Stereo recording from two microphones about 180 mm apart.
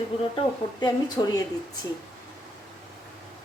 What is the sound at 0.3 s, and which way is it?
A woman's voice, 25° left (ahead or behind).